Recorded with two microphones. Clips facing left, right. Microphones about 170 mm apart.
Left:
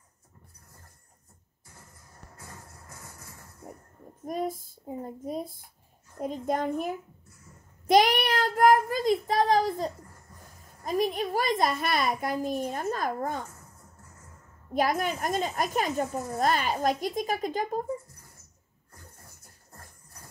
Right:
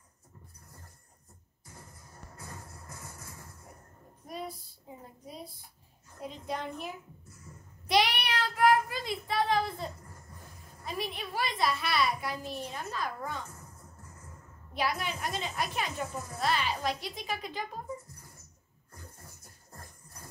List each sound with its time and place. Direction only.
3.7 s a sound: 50° left (ahead or behind)
4.3 s a child's voice: 45° left (ahead or behind)
14.7 s a child's voice: 45° left (ahead or behind)